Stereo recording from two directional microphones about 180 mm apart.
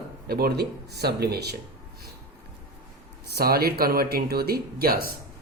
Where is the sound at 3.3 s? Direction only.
60° right (ahead or behind).